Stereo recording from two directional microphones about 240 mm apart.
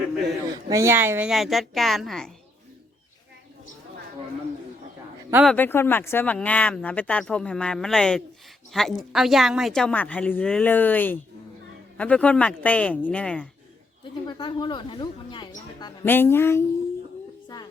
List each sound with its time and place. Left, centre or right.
0.7 s speech: centre
5.3 s speech: centre
5.5 s speech: centre
14.0 s a woman's voice: centre